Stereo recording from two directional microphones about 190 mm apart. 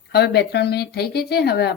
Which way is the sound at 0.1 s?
60° left (ahead or behind).